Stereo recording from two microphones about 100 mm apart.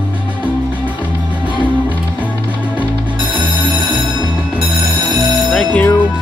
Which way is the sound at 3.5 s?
55° right (ahead or behind).